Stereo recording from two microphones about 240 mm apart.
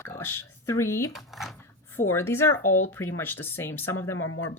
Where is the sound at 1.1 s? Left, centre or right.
Centre.